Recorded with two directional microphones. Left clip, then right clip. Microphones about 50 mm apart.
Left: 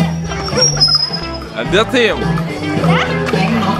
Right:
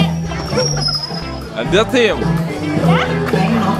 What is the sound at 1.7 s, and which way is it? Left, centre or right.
Speech, centre.